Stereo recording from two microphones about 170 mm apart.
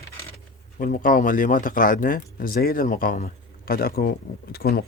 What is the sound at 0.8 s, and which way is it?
Speech, 55° left (ahead or behind).